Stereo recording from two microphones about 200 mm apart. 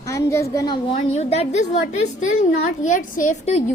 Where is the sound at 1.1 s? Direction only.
35° left (ahead or behind).